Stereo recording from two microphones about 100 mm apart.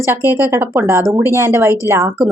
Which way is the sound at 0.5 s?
25° right (ahead or behind).